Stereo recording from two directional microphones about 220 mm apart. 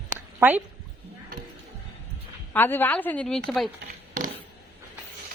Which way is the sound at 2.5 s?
10° left (ahead or behind).